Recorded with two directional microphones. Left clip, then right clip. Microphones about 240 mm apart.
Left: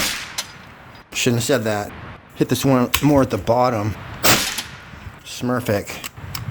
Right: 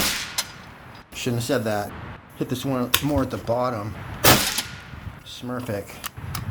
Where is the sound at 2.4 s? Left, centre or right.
Left.